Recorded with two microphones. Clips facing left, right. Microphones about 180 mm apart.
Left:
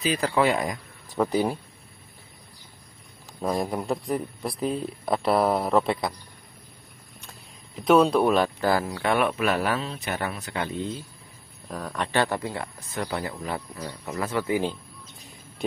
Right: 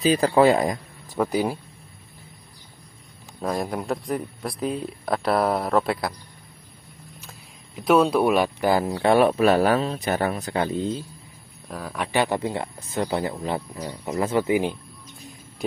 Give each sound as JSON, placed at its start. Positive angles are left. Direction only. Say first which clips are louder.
{"t": 0.0, "sound": "speech", "louder": "right 6 dB", "side_deg": -35}
{"t": 1.1, "sound": "speech", "louder": "even", "side_deg": -5}
{"t": 3.3, "sound": "speech", "louder": "even", "side_deg": 0}
{"t": 7.2, "sound": "speech", "louder": "right 1 dB", "side_deg": -5}
{"t": 11.7, "sound": "speech", "louder": "right 1 dB", "side_deg": -5}